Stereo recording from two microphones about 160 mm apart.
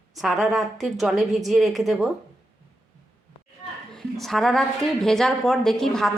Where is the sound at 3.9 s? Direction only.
Centre (ahead or behind).